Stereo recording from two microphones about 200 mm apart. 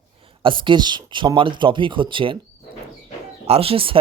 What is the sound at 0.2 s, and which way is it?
A man's voice, 25° right (ahead or behind).